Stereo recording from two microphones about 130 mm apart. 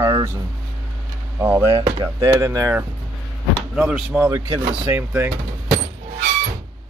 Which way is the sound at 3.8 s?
10° right (ahead or behind).